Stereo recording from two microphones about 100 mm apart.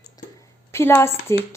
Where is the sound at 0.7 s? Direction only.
25° left (ahead or behind).